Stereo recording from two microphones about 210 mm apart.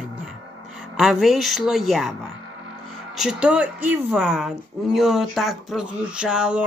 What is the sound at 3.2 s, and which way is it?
Speech, 5° right (ahead or behind).